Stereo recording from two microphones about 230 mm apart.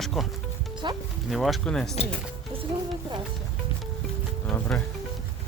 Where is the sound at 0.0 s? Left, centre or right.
Centre.